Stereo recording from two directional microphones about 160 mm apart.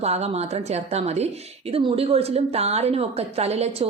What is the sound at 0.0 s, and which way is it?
Speech, 40° right (ahead or behind).